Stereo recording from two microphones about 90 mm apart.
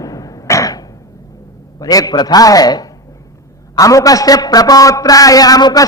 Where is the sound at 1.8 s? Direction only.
45° left (ahead or behind).